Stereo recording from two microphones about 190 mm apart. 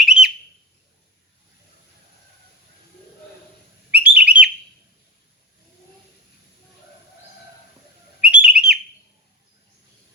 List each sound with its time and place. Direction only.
0.0 s a sound: 5° right (ahead or behind)
3.9 s bird: 5° right (ahead or behind)
8.3 s bird: 5° right (ahead or behind)